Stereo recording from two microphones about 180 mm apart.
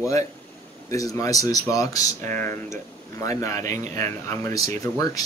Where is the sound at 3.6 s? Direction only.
45° right (ahead or behind).